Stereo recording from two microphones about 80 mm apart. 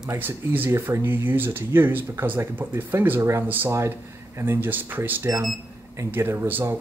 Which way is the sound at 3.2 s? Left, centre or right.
Right.